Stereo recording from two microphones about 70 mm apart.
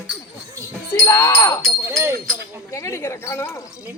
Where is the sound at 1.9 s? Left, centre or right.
Right.